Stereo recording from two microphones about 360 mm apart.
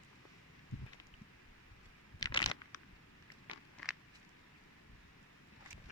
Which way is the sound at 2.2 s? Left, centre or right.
Centre.